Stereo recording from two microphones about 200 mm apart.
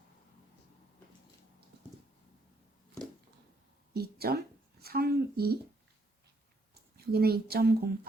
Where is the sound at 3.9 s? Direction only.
50° right (ahead or behind).